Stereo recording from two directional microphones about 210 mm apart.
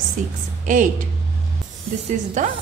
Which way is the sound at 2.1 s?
35° right (ahead or behind).